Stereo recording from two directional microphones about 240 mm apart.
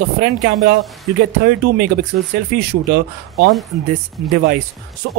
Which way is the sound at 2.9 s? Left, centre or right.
Right.